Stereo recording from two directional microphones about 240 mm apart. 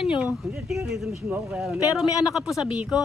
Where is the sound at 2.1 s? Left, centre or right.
Centre.